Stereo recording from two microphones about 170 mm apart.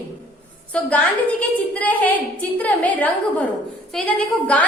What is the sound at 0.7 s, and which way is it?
A woman's voice, 10° left (ahead or behind).